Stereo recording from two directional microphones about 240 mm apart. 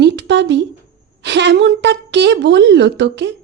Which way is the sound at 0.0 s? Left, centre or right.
Right.